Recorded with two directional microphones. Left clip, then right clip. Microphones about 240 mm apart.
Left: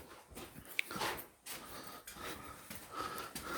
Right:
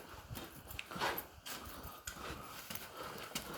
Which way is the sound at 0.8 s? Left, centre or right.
Left.